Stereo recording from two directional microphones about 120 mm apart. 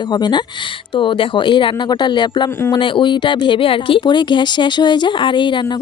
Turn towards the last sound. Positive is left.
turn(degrees=40)  # may be behind; listen again after turning